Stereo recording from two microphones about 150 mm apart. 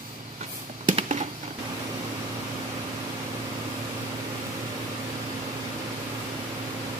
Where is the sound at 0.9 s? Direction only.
50° right (ahead or behind).